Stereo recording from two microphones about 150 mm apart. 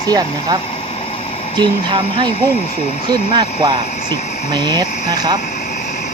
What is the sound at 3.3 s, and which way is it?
Speech, 30° right (ahead or behind).